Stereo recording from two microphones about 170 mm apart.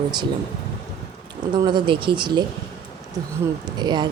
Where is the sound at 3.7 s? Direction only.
25° right (ahead or behind).